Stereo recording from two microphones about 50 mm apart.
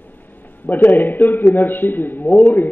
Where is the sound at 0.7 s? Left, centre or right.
Left.